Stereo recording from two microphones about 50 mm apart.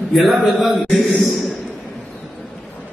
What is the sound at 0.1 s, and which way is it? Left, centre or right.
Mantra, centre.